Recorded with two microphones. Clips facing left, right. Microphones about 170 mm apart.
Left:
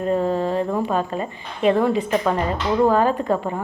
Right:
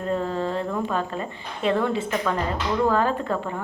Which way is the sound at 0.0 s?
15° left (ahead or behind).